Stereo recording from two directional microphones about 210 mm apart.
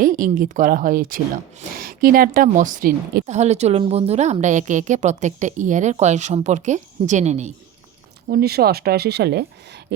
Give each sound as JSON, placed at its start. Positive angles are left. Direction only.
{"t": 0.0, "sound": "speech", "side_deg": -40}
{"t": 8.3, "sound": "speech", "side_deg": -50}